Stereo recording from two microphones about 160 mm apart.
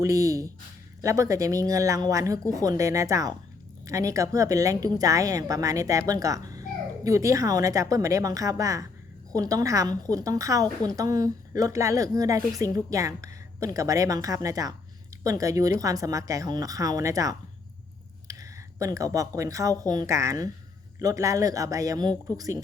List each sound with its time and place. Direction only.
0.0 s a woman's voice: 20° right (ahead or behind)
18.3 s a sound: 20° right (ahead or behind)
19.4 s a woman's voice: 20° right (ahead or behind)